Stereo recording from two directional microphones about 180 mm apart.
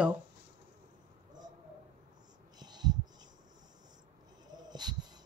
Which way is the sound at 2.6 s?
25° right (ahead or behind).